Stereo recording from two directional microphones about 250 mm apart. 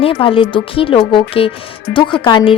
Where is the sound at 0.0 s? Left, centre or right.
Left.